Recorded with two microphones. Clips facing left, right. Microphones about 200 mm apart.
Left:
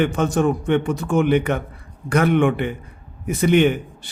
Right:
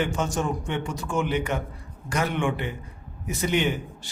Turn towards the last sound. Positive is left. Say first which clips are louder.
# left 9 dB
turn(degrees=55)  # may be behind; listen again after turning